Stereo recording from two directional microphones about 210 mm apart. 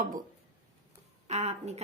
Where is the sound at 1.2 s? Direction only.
30° right (ahead or behind).